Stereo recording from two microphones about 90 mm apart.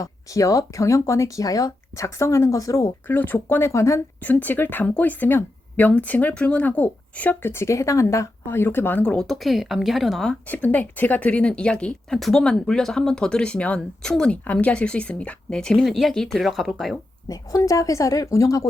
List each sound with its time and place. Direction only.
0.0 s speech: 40° left (ahead or behind)
3.1 s speech: 20° left (ahead or behind)
4.2 s speech: 20° left (ahead or behind)
9.0 s speech: 5° left (ahead or behind)
10.2 s a woman's voice: 15° left (ahead or behind); by 17.0 s centre (ahead or behind)
17.2 s speech: 40° left (ahead or behind)